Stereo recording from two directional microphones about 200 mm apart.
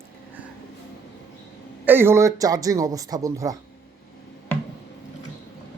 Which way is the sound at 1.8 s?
10° right (ahead or behind).